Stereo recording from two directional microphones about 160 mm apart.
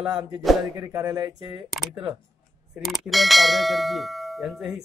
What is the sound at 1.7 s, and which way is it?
A man's voice, 5° right (ahead or behind).